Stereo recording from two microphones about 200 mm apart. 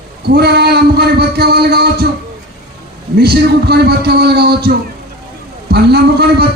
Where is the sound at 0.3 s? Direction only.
55° right (ahead or behind).